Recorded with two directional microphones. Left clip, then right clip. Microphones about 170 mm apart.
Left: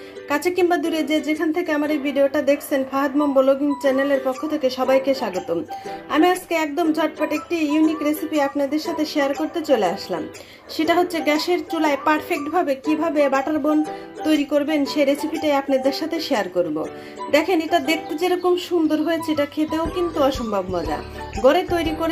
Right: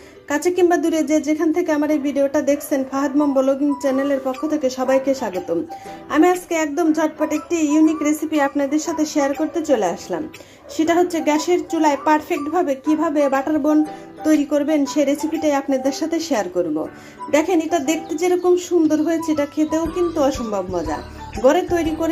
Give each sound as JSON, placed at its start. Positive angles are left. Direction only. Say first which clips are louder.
{"t": 0.5, "sound": "a woman's voice", "louder": "right 4 dB", "side_deg": -5}